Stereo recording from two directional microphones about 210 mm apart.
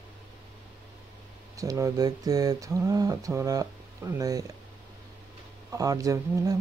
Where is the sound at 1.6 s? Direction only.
15° right (ahead or behind).